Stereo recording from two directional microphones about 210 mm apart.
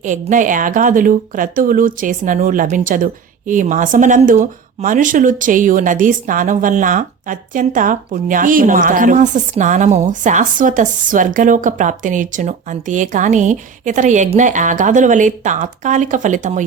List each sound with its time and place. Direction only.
0.0 s speech: 35° right (ahead or behind)